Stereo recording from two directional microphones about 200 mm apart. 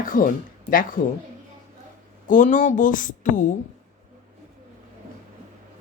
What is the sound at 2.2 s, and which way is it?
Speech, 40° left (ahead or behind).